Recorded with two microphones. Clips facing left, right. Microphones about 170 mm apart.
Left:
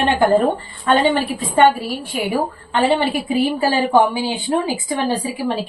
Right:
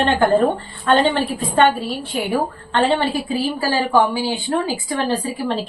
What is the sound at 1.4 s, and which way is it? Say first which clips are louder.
A woman's voice: left 2 dB; 10° left (ahead or behind).